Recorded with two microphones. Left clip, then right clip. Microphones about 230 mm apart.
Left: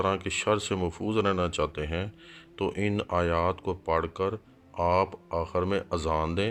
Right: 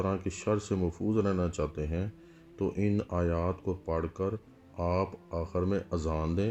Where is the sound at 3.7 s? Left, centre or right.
Left.